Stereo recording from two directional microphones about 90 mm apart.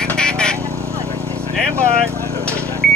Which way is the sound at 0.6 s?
35° right (ahead or behind).